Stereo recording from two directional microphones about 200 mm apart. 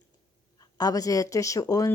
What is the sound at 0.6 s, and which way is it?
Speech, 20° left (ahead or behind).